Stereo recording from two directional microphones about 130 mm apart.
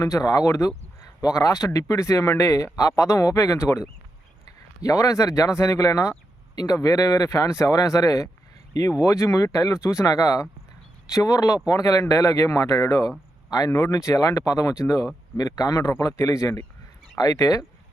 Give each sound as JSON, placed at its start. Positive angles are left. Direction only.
{"t": 0.0, "sound": "speech", "side_deg": 25}
{"t": 4.8, "sound": "speech", "side_deg": 25}